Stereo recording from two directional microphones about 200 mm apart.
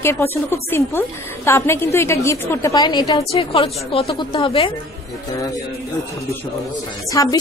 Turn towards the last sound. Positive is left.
turn(degrees=20)  # may be behind; listen again after turning